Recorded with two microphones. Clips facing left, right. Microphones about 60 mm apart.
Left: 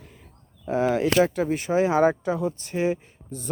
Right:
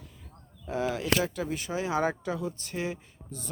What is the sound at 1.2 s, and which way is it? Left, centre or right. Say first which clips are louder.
A man's voice: left 9 dB; left.